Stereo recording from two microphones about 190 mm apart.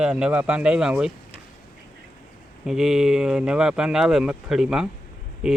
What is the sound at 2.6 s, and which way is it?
Speech, centre (ahead or behind).